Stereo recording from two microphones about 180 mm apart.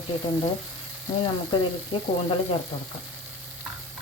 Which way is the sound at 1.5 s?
25° left (ahead or behind).